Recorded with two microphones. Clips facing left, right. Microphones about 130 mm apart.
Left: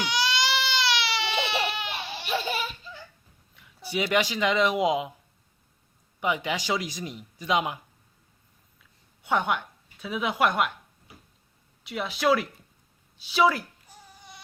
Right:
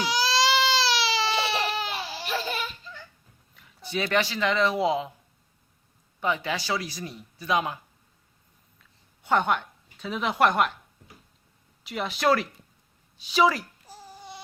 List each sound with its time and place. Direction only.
0.0 s baby cry: 35° right (ahead or behind)
2.5 s laughter: 5° left (ahead or behind)
3.5 s speech: 10° left (ahead or behind)
6.1 s speech: 15° left (ahead or behind)
9.2 s speech: 5° left (ahead or behind)
11.8 s speech: centre (ahead or behind)
13.8 s a sound: 35° right (ahead or behind)